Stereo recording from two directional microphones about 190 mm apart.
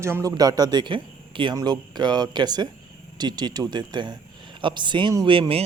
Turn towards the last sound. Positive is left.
turn(degrees=-30)  # may be behind; listen again after turning